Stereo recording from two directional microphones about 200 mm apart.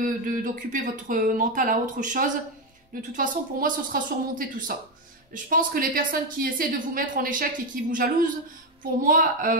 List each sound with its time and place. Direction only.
0.0 s a woman's voice: 45° right (ahead or behind)